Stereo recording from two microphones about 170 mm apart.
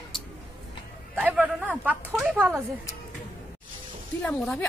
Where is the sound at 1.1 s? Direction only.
10° right (ahead or behind).